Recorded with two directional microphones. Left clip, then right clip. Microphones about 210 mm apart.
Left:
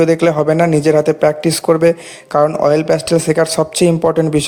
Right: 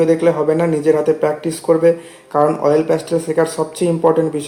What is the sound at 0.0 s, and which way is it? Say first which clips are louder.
Speech: left 2 dB; 45° left (ahead or behind).